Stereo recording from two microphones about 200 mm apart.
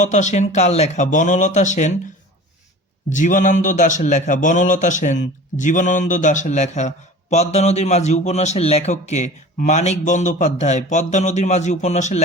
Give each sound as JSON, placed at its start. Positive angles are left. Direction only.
{"t": 0.0, "sound": "a man's voice", "side_deg": 35}
{"t": 3.1, "sound": "a man's voice", "side_deg": 40}